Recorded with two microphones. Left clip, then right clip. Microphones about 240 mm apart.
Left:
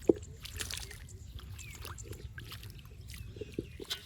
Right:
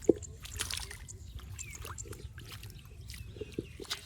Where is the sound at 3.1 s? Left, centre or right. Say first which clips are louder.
Right 1 dB; centre.